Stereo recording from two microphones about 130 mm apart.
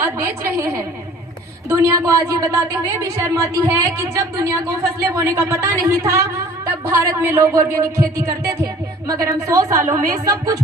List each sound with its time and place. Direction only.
0.0 s a woman's voice: 20° right (ahead or behind)